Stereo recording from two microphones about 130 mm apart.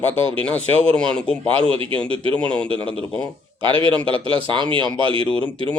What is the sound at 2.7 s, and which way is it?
A man's voice, 40° right (ahead or behind).